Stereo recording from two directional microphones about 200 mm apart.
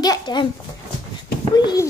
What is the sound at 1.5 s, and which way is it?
Speech, 20° left (ahead or behind).